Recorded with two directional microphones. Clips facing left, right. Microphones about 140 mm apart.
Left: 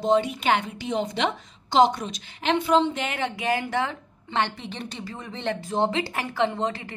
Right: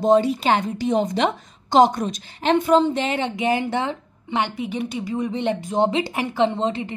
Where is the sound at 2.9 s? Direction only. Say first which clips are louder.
Right 5 dB; 25° right (ahead or behind).